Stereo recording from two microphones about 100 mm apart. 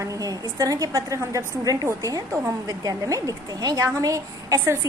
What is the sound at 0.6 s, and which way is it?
A woman's voice, 35° right (ahead or behind).